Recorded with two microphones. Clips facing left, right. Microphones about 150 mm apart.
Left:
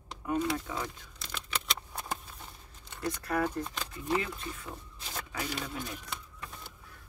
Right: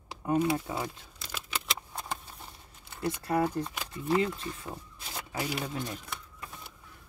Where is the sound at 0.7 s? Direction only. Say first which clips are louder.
Right 2 dB; 10° right (ahead or behind).